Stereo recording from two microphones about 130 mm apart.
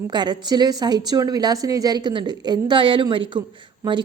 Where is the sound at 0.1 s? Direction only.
35° right (ahead or behind).